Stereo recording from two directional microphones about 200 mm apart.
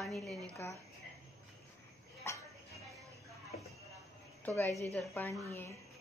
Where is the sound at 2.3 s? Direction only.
15° left (ahead or behind).